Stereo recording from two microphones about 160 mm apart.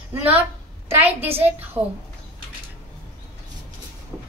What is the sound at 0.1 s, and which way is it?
A woman's voice, 10° right (ahead or behind).